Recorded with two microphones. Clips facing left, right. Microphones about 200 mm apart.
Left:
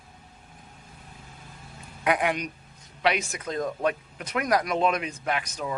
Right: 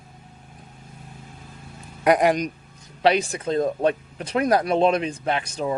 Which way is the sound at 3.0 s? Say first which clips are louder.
Right 6 dB; 30° right (ahead or behind).